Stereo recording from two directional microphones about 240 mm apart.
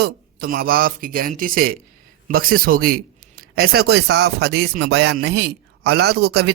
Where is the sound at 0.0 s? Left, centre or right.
Right.